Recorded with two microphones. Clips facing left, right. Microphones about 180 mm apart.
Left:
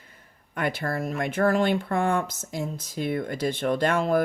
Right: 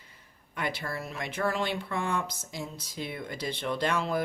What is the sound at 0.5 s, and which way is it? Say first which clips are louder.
Speech: left 6 dB; 50° left (ahead or behind).